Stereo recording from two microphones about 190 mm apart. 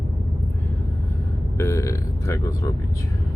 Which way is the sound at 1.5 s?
15° left (ahead or behind).